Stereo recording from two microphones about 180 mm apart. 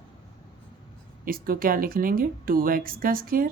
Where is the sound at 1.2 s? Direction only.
55° right (ahead or behind).